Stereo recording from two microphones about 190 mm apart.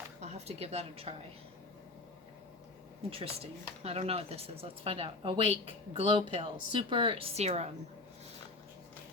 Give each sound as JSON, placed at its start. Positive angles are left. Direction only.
{"t": 0.2, "sound": "a woman's voice", "side_deg": -35}
{"t": 3.1, "sound": "speech", "side_deg": -30}